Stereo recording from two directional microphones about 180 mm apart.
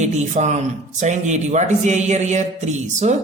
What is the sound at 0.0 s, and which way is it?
Speech, 40° right (ahead or behind).